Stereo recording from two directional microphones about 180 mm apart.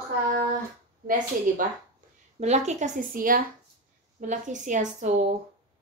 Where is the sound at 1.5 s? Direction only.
50° right (ahead or behind).